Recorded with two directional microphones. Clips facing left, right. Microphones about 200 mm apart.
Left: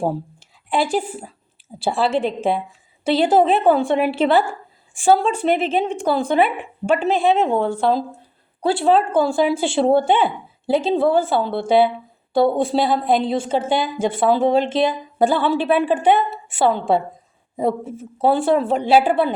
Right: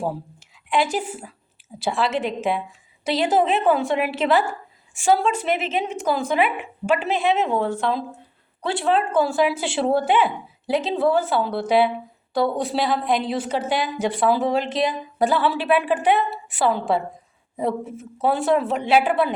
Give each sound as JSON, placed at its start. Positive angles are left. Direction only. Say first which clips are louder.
{"t": 0.0, "sound": "a woman's voice", "louder": "left 4 dB", "side_deg": 30}
{"t": 17.8, "sound": "a woman's voice", "louder": "left 4 dB", "side_deg": 30}